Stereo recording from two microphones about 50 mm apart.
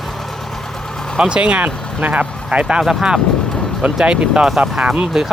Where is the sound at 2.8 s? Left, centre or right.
Centre.